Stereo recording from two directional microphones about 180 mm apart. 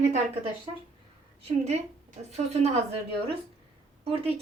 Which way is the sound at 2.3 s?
35° right (ahead or behind).